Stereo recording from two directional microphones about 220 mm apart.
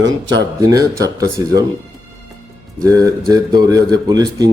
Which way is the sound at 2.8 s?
15° right (ahead or behind).